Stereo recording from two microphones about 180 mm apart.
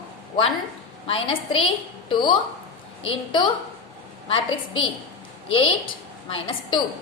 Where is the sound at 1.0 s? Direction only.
30° left (ahead or behind).